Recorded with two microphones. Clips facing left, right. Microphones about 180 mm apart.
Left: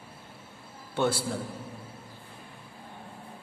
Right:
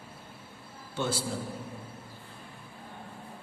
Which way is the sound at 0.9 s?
60° left (ahead or behind).